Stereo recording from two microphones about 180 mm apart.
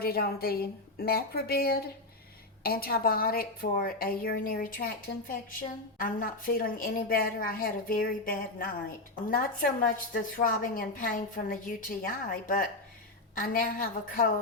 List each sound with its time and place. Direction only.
0.0 s a woman's voice: 60° left (ahead or behind)